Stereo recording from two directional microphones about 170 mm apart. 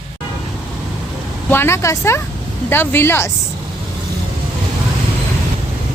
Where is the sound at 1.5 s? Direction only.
15° left (ahead or behind).